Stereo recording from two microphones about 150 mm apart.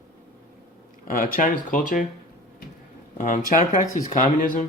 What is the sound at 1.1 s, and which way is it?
Speech, 65° left (ahead or behind).